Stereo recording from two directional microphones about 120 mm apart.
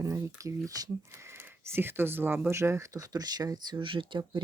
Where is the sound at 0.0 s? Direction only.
25° right (ahead or behind).